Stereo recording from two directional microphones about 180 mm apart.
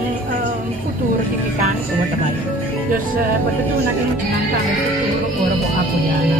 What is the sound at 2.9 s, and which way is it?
Speech, 50° right (ahead or behind).